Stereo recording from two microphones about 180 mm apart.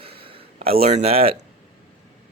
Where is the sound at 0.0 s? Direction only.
30° right (ahead or behind).